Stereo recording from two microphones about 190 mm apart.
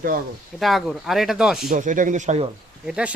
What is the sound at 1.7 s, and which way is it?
Speech, 45° right (ahead or behind).